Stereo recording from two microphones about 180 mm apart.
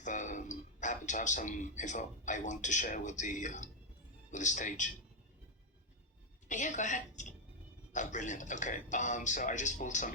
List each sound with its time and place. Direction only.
0.0 s a man's voice: 45° left (ahead or behind)
6.5 s a man's voice: 45° left (ahead or behind)